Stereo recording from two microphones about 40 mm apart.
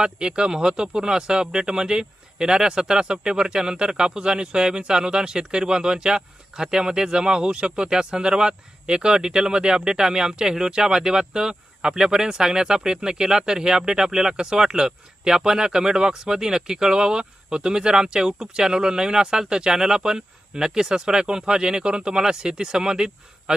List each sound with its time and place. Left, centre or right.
0.0 s speech: right